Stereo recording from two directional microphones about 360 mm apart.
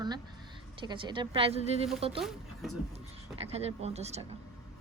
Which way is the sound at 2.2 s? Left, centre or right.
Centre.